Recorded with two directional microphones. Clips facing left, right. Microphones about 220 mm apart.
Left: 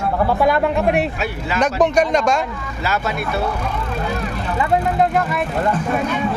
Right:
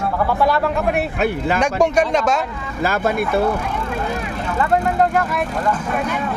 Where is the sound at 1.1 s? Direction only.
55° right (ahead or behind).